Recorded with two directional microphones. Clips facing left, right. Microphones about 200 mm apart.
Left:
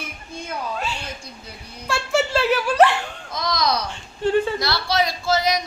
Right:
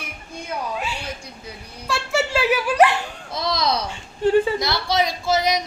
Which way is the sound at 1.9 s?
5° right (ahead or behind).